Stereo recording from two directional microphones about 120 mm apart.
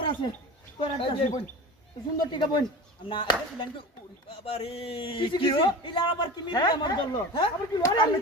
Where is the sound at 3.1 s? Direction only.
40° left (ahead or behind).